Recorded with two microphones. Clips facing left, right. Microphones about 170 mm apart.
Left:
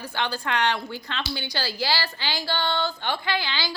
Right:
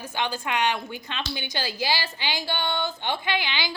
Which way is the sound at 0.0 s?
15° right (ahead or behind).